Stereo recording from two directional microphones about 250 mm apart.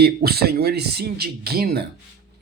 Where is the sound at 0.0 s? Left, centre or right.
Right.